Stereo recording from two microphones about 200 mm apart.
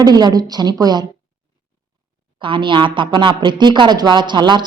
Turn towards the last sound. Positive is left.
turn(degrees=-20)  # may be behind; listen again after turning